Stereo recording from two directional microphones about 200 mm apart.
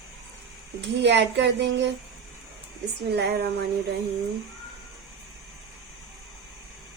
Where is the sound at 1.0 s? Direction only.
60° right (ahead or behind).